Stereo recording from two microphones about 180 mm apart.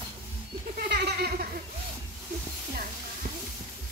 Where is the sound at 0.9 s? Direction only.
65° right (ahead or behind).